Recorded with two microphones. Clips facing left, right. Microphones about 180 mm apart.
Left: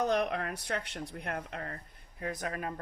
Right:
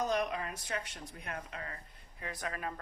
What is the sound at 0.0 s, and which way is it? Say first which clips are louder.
Speech: left 3 dB; 60° left (ahead or behind).